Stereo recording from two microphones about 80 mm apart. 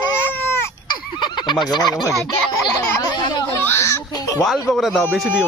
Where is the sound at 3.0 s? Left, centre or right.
Left.